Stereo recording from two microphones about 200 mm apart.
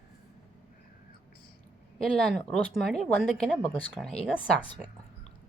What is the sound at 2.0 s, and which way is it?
Speech, centre (ahead or behind).